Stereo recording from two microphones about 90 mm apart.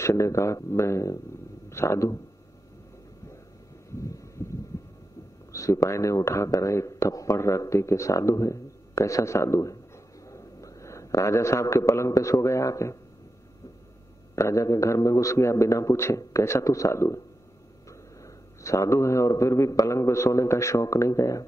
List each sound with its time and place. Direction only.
0.0 s speech: 35° left (ahead or behind)
3.9 s a sound: 35° left (ahead or behind)
5.5 s speech: 35° left (ahead or behind)
14.3 s speech: 35° left (ahead or behind)
17.8 s a sound: 35° left (ahead or behind)
19.9 s speech: 30° left (ahead or behind)